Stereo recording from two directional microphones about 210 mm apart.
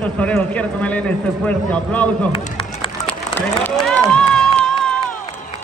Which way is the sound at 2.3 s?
25° left (ahead or behind).